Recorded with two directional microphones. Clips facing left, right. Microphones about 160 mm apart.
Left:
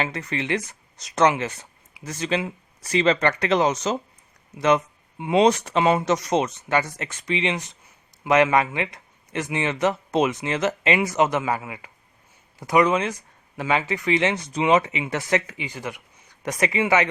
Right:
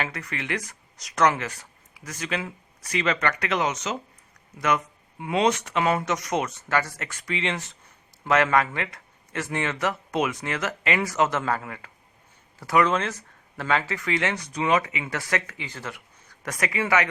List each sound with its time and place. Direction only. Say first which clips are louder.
0.0 s speech: left 5 dB; 25° left (ahead or behind)